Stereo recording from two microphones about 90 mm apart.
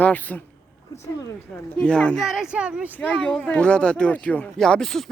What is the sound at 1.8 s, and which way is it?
Speech, 10° left (ahead or behind).